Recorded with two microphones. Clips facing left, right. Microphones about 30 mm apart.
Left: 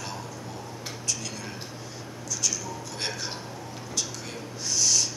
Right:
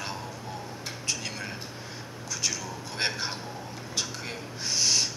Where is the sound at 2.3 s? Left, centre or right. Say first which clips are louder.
Left 1 dB; right.